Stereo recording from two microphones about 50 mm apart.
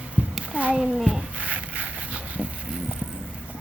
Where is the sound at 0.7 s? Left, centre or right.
Centre.